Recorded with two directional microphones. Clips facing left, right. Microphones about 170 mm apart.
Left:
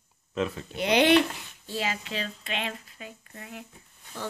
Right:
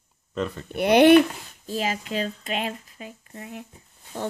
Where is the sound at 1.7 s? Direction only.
40° right (ahead or behind).